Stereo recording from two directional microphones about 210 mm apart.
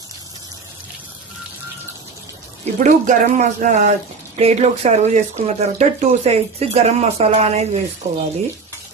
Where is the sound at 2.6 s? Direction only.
35° right (ahead or behind).